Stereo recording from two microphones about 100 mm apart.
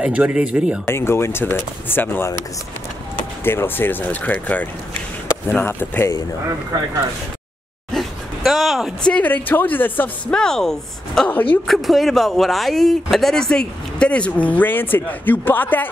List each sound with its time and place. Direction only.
0.0 s speech: 10° right (ahead or behind)
0.8 s speech: 25° left (ahead or behind)
3.4 s speech: 20° left (ahead or behind)
7.9 s a sound: centre (ahead or behind)
9.1 s speech: 15° left (ahead or behind)
10.3 s a woman's voice: 5° left (ahead or behind)